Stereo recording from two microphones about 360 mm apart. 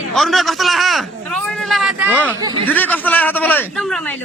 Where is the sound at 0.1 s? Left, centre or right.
Centre.